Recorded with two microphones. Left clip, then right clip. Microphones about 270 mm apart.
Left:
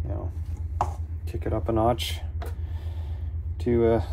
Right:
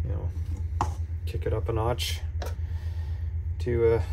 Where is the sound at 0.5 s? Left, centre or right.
Centre.